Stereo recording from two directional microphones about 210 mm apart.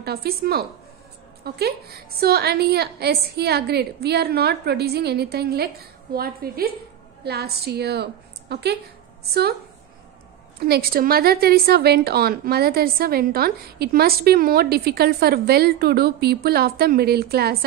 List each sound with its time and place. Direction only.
0.0 s a woman's voice: 50° right (ahead or behind)
10.6 s a woman's voice: 45° right (ahead or behind)